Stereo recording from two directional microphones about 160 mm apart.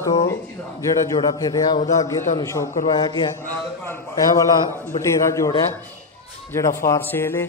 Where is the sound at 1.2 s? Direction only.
25° left (ahead or behind).